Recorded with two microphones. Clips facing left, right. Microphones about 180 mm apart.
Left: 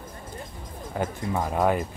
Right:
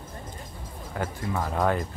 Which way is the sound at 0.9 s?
20° left (ahead or behind).